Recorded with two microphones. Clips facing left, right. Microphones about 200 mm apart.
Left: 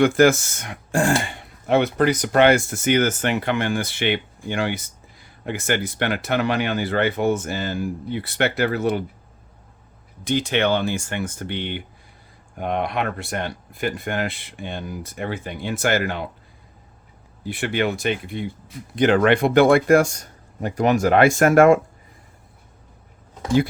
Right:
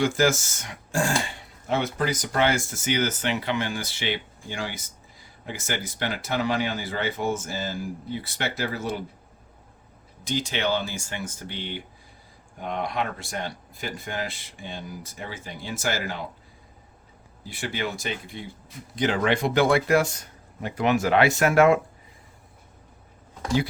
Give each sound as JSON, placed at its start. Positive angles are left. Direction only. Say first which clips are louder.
{"t": 0.0, "sound": "speech", "louder": "left 7 dB", "side_deg": 60}
{"t": 10.2, "sound": "speech", "louder": "left 6 dB", "side_deg": 60}
{"t": 17.4, "sound": "speech", "louder": "left 8 dB", "side_deg": 60}